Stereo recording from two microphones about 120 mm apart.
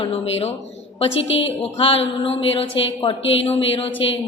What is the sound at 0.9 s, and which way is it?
A woman's voice, 50° left (ahead or behind).